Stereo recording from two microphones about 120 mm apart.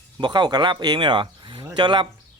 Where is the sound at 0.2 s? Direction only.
40° right (ahead or behind).